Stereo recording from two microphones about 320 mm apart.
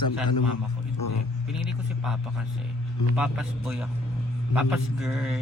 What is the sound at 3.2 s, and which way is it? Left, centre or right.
Speech, centre.